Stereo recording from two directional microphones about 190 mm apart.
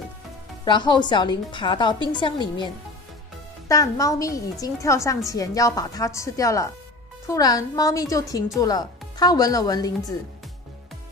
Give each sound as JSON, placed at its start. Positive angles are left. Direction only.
{"t": 0.7, "sound": "a woman's voice", "side_deg": 25}